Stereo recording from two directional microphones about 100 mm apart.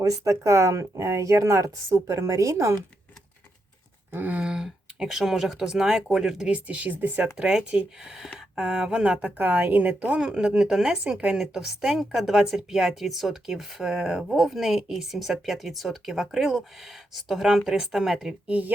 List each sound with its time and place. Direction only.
0.0 s speech: 30° right (ahead or behind)
4.1 s speech: 20° right (ahead or behind)